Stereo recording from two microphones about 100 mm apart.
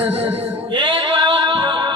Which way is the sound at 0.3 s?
15° right (ahead or behind).